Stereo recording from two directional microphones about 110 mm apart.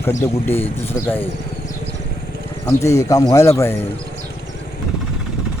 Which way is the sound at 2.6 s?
25° left (ahead or behind).